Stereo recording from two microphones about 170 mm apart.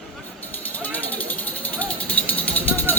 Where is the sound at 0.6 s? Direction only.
10° left (ahead or behind).